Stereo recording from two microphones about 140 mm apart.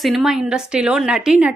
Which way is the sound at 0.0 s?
Centre (ahead or behind).